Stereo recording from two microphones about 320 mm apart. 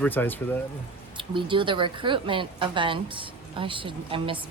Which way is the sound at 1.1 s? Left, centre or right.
Centre.